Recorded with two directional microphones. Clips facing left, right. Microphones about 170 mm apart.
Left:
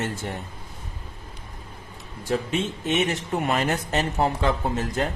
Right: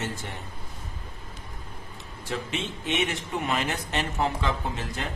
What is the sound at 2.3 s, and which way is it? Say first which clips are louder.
A man's voice: left 6 dB; 40° left (ahead or behind).